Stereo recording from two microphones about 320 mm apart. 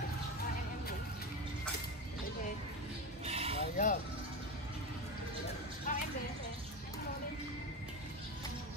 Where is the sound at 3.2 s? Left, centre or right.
Centre.